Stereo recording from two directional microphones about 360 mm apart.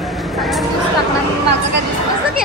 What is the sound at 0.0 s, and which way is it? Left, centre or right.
Chatter, centre.